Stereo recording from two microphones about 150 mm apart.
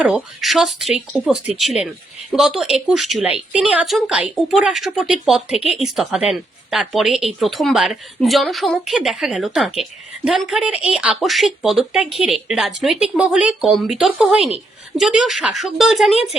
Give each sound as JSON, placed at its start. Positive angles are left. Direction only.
{"t": 0.0, "sound": "speech", "side_deg": -5}